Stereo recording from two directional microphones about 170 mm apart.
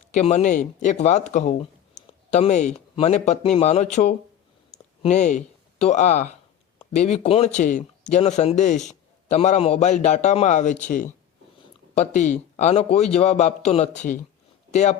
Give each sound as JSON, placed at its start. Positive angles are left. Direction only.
{"t": 0.1, "sound": "speech", "side_deg": 40}
{"t": 2.0, "sound": "a sound", "side_deg": 40}
{"t": 2.9, "sound": "speech", "side_deg": 40}
{"t": 5.0, "sound": "speech", "side_deg": 45}